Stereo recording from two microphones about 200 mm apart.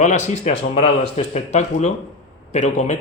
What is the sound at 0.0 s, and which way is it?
Speech, 35° left (ahead or behind).